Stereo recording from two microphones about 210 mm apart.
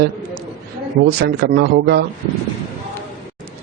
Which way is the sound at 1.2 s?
50° right (ahead or behind).